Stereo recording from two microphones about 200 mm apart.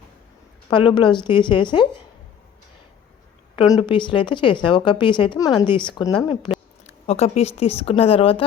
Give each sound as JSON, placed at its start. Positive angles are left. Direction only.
{"t": 0.7, "sound": "speech", "side_deg": 25}
{"t": 3.8, "sound": "speech", "side_deg": 25}
{"t": 6.8, "sound": "speech", "side_deg": 30}